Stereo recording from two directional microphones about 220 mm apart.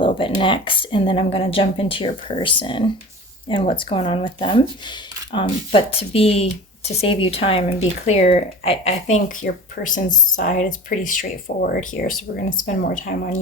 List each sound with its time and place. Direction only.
0.0 s speech: 25° left (ahead or behind)